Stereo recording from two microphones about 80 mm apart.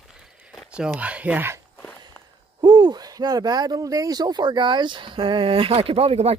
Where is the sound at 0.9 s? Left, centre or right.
Centre.